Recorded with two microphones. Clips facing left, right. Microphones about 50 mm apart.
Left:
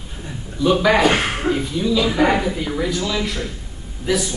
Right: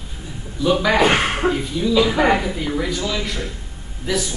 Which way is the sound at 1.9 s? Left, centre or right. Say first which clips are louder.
Right 1 dB; centre.